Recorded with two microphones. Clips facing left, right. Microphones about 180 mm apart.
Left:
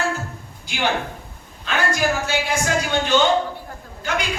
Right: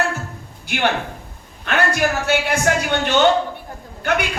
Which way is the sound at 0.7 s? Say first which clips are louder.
Right 2 dB; 60° right (ahead or behind).